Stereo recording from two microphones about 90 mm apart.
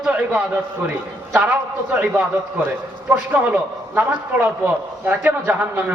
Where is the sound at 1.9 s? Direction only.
15° right (ahead or behind).